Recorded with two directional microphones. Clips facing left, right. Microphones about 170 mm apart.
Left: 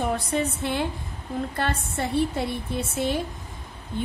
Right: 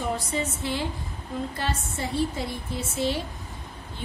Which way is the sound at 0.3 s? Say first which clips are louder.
Left 3 dB; 60° left (ahead or behind).